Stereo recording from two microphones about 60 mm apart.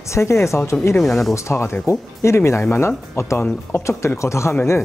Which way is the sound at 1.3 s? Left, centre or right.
Left.